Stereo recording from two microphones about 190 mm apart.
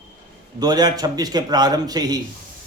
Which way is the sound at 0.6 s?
20° right (ahead or behind).